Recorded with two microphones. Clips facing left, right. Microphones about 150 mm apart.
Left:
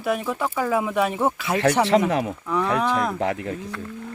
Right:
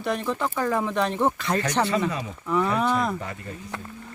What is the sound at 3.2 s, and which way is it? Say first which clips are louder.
Speech: left 10 dB; 90° left.